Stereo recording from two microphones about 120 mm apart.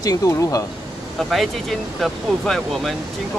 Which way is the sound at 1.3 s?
Centre (ahead or behind).